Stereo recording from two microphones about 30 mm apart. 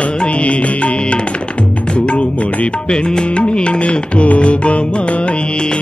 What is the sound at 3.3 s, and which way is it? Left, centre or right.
Music, left.